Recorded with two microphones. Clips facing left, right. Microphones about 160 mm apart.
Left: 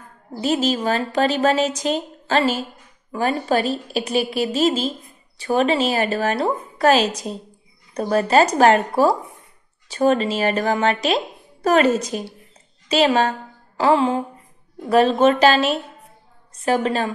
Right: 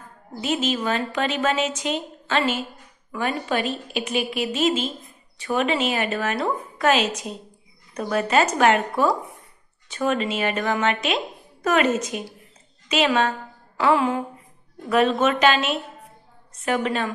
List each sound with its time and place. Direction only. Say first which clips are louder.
0.4 s a woman's voice: left 4 dB; 35° left (ahead or behind)
13.7 s a sound: left 3 dB; 30° left (ahead or behind)
14.9 s a woman's voice: left 4 dB; 35° left (ahead or behind)